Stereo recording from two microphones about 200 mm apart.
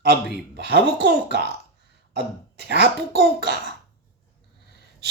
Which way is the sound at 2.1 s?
60° right (ahead or behind).